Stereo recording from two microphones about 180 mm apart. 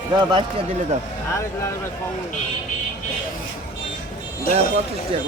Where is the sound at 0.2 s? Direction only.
25° right (ahead or behind).